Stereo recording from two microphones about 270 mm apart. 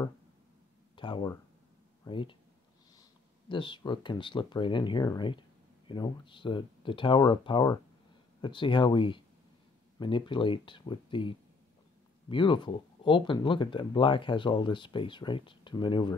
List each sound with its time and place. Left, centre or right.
0.9 s speech: centre